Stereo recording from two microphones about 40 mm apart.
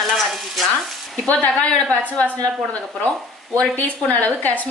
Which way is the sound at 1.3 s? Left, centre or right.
Left.